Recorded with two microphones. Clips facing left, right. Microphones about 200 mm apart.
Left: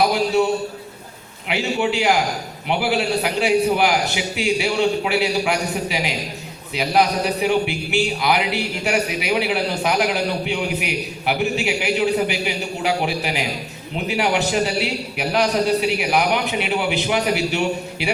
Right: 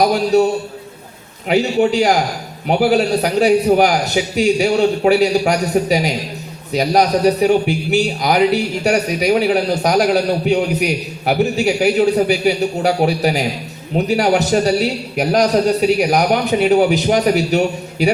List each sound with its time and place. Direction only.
0.1 s a man's voice: 40° right (ahead or behind)
1.5 s a man's voice: 40° right (ahead or behind)